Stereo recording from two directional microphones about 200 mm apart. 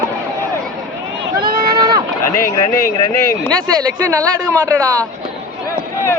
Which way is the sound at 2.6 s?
15° left (ahead or behind).